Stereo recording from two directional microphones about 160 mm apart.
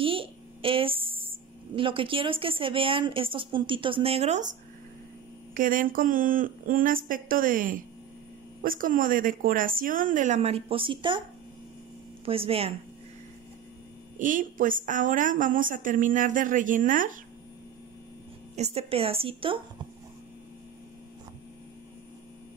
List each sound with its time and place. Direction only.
0.0 s a sound: 35° right (ahead or behind)
1.8 s a woman's voice: 35° right (ahead or behind); by 4.6 s 50° right (ahead or behind)
5.5 s a woman's voice: 60° right (ahead or behind); by 11.2 s 30° right (ahead or behind)
12.3 s a woman's voice: 35° right (ahead or behind)
14.1 s a woman's voice: 55° right (ahead or behind)
18.6 s a woman's voice: 40° right (ahead or behind)